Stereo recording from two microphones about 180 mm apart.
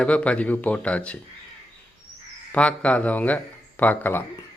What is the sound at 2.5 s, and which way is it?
Speech, 5° left (ahead or behind).